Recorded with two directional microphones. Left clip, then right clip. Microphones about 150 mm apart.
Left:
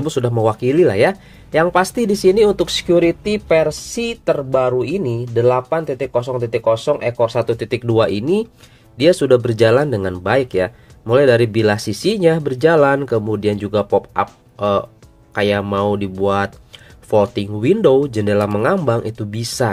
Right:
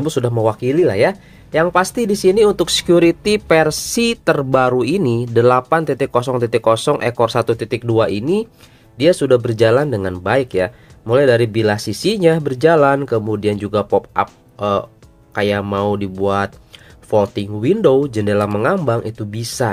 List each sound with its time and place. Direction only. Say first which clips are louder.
0.0 s speech: even; 5° right (ahead or behind)
2.5 s speech: right 1 dB; 25° right (ahead or behind); by 7.4 s 40° right (ahead or behind)
7.4 s speech: right 1 dB; 15° right (ahead or behind)
7.8 s speech: left 1 dB; centre (ahead or behind)